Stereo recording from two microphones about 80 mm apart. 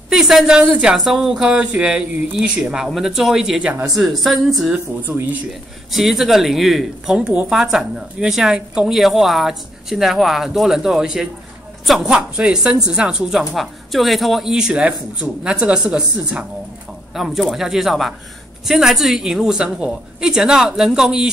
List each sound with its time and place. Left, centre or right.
0.1 s a woman's voice: centre
5.0 s speech: right
5.5 s a woman's voice: centre
7.2 s a woman's voice: centre